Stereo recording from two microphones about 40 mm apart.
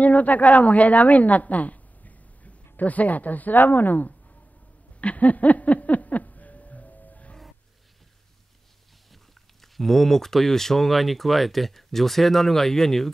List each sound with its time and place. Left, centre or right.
0.0 s a woman's voice: left
5.0 s a sound: left
9.1 s speech: centre